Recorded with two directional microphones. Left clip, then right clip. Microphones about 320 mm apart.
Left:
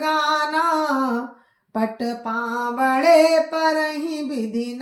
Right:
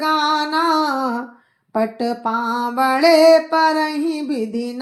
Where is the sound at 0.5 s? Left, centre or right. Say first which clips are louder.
Right 2 dB; centre.